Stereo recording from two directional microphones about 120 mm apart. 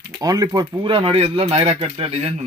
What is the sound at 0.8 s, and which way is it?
Speech, 50° right (ahead or behind).